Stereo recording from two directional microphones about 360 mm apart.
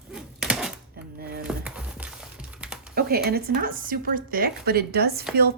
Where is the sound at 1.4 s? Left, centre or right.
Centre.